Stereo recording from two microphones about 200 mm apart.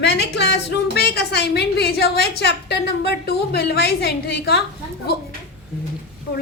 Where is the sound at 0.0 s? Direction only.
60° left (ahead or behind).